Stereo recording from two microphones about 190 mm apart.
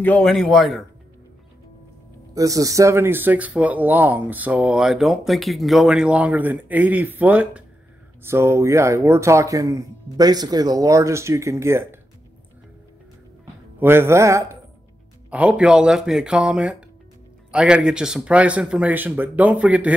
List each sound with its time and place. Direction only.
0.0 s speech: 5° left (ahead or behind)
2.3 s speech: 15° right (ahead or behind)
13.7 s speech: 10° right (ahead or behind)